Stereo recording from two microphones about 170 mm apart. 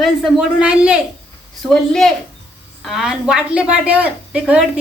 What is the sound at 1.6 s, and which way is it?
Speech, 5° left (ahead or behind).